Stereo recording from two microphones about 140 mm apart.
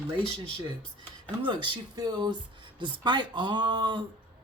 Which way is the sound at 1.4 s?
35° right (ahead or behind).